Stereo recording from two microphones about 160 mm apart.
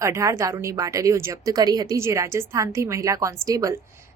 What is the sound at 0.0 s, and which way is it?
A woman's voice, 20° right (ahead or behind).